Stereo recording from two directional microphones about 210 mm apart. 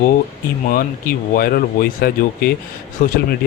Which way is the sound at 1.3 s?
45° left (ahead or behind).